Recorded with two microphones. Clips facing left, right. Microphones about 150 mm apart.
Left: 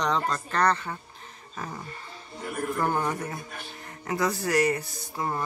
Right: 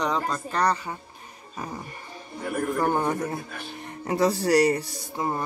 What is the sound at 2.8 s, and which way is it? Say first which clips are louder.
Speech: right 2 dB; 20° right (ahead or behind).